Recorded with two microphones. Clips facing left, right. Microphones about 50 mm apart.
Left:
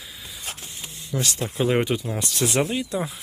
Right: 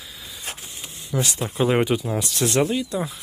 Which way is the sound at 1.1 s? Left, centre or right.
Centre.